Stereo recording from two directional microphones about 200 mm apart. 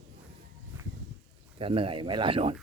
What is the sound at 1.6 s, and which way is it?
Speech, 25° right (ahead or behind).